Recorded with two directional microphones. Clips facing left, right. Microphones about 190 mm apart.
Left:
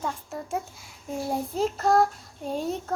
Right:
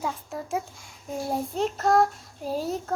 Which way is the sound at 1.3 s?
Centre (ahead or behind).